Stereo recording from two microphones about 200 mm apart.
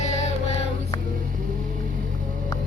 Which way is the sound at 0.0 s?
35° left (ahead or behind).